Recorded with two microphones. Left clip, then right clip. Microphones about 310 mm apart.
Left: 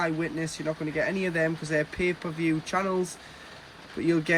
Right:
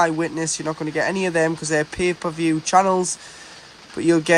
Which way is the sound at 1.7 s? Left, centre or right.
Right.